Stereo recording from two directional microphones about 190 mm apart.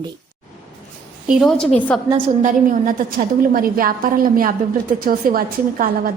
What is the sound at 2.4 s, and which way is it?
A woman's voice, 45° right (ahead or behind).